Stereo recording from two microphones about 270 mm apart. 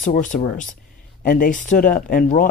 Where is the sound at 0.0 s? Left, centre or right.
Left.